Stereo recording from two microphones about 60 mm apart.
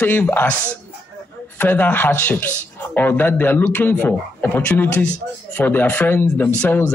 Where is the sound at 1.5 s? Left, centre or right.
Left.